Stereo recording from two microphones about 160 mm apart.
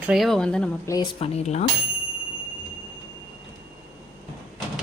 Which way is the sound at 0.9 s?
25° left (ahead or behind).